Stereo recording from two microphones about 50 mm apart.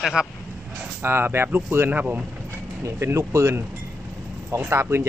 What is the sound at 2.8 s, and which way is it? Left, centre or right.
Speech, right.